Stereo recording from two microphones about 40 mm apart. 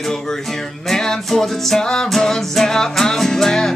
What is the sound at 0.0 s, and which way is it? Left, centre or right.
Music, centre.